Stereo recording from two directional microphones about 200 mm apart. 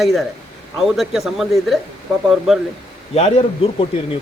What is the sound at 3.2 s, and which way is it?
Speech, 30° left (ahead or behind).